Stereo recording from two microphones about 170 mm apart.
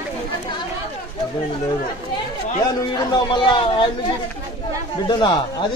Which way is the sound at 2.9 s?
25° left (ahead or behind).